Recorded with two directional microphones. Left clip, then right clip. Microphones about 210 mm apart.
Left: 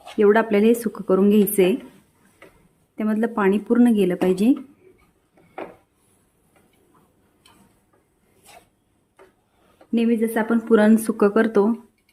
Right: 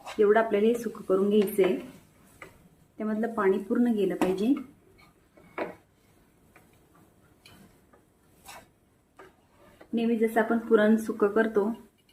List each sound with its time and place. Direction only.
0.2 s speech: 60° left (ahead or behind)
3.0 s speech: 60° left (ahead or behind)
9.9 s speech: 55° left (ahead or behind)